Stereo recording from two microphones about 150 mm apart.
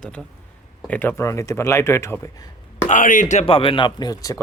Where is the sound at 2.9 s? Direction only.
60° left (ahead or behind); by 4.4 s 20° left (ahead or behind).